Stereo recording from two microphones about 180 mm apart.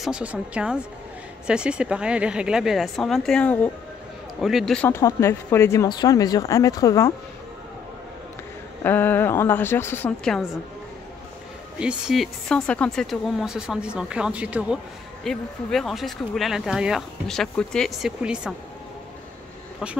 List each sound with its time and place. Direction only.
0.0 s speech: 5° right (ahead or behind)
4.8 s speech: 15° left (ahead or behind)
8.8 s speech: 10° left (ahead or behind)
11.8 s speech: 5° right (ahead or behind)